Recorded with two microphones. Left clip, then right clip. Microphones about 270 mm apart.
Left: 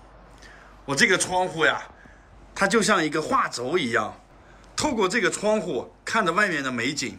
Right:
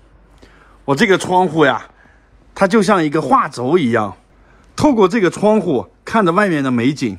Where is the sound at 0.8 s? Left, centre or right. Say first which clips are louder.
Right 7 dB; centre.